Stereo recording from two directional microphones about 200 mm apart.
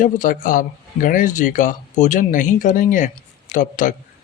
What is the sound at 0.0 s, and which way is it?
Speech, 40° left (ahead or behind).